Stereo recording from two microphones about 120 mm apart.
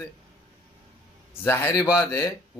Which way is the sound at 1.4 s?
20° left (ahead or behind).